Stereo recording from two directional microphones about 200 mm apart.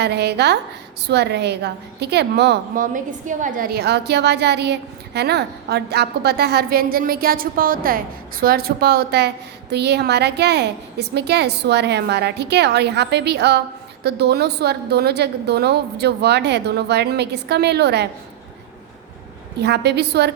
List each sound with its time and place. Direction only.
0.0 s a woman's voice: 55° right (ahead or behind)
19.5 s a woman's voice: 55° right (ahead or behind)